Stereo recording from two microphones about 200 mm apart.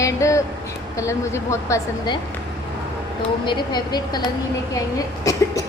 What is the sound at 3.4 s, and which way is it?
Speech, 20° left (ahead or behind).